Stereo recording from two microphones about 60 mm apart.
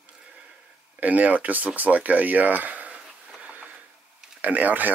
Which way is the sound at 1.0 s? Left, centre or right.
Right.